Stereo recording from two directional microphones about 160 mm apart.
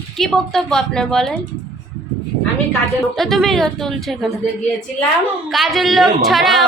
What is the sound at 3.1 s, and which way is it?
A woman's voice, centre (ahead or behind).